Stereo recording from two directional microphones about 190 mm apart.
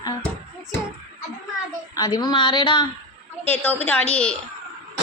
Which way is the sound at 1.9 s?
20° left (ahead or behind).